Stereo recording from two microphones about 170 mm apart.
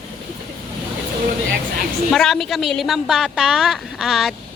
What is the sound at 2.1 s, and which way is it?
A woman's voice, centre (ahead or behind).